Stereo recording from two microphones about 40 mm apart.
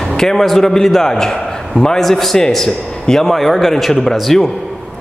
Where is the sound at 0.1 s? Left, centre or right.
Centre.